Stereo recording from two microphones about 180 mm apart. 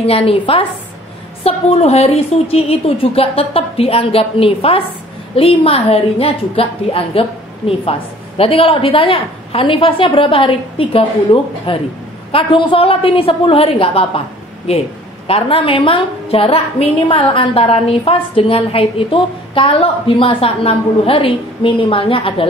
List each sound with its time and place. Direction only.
0.0 s a woman's voice: 35° left (ahead or behind)